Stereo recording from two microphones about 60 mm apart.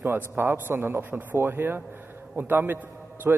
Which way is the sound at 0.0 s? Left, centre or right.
Right.